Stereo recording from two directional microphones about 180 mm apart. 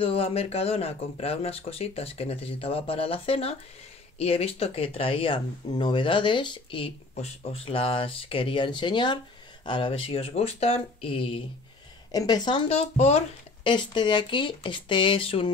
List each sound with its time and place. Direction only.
0.0 s speech: 30° left (ahead or behind)
13.7 s speech: 25° left (ahead or behind)